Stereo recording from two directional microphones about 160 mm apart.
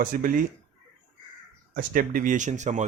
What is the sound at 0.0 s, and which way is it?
Speech, 60° right (ahead or behind).